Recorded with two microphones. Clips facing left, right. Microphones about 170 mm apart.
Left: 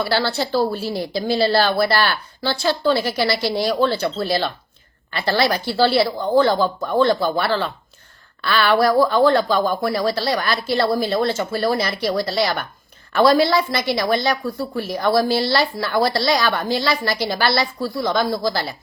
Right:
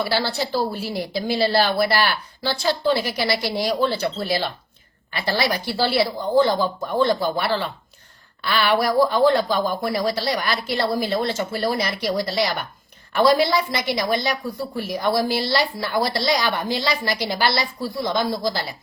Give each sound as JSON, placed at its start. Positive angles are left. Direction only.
{"t": 0.0, "sound": "a woman's voice", "side_deg": -15}